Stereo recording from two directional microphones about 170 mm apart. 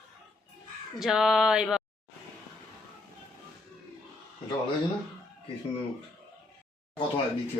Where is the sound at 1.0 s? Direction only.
Centre (ahead or behind).